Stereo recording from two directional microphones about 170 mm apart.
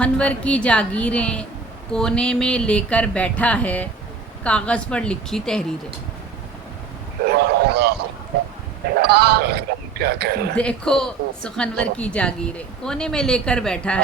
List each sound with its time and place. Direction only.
0.0 s a woman's voice: 5° left (ahead or behind)
7.3 s a sound: 70° right (ahead or behind)
9.0 s speech: 70° right (ahead or behind)
10.5 s a woman's voice: 5° left (ahead or behind)